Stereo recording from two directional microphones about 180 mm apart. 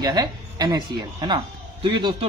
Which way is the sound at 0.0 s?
20° right (ahead or behind).